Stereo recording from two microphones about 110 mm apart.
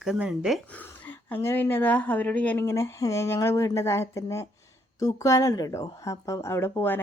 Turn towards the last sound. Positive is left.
turn(degrees=20)  # may be behind; listen again after turning